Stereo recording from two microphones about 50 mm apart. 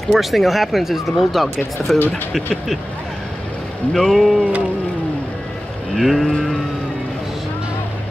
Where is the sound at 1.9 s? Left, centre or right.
Left.